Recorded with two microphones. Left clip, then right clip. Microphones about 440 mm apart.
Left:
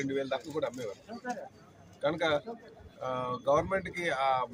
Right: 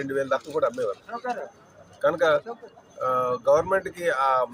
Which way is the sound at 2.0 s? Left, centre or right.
Left.